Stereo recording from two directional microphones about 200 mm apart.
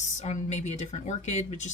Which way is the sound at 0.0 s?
35° left (ahead or behind).